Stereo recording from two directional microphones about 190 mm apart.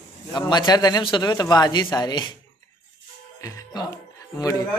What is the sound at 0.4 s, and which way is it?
A man's voice, 20° left (ahead or behind).